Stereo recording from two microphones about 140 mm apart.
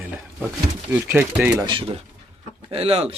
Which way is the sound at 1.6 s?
40° right (ahead or behind).